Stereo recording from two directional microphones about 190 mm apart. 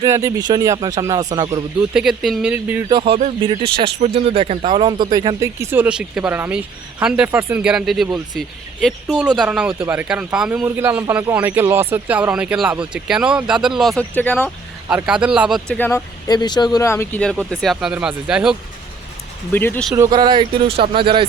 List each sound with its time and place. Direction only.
0.0 s speech: 15° right (ahead or behind)
1.9 s speech: 5° right (ahead or behind)
2.9 s speech: 30° right (ahead or behind); by 13.9 s centre (ahead or behind)
13.9 s speech: 15° right (ahead or behind)
14.2 s speech: 10° left (ahead or behind)
14.8 s speech: 5° right (ahead or behind)
15.7 s speech: 10° left (ahead or behind)
19.5 s speech: 10° left (ahead or behind)
20.0 s speech: 20° right (ahead or behind)